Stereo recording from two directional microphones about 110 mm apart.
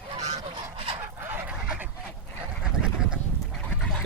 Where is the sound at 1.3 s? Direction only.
15° right (ahead or behind).